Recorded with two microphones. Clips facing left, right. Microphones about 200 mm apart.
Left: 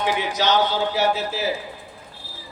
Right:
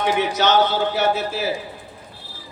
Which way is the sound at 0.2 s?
60° right (ahead or behind).